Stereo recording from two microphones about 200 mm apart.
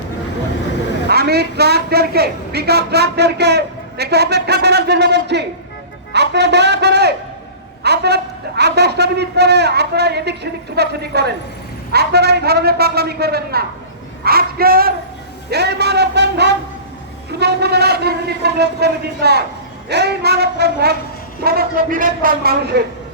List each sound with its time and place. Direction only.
1.0 s a woman's voice: 55° right (ahead or behind)